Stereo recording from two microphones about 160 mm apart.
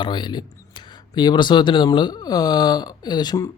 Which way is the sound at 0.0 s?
30° left (ahead or behind).